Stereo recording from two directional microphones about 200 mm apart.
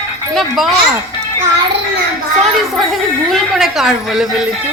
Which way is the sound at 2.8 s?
Centre (ahead or behind).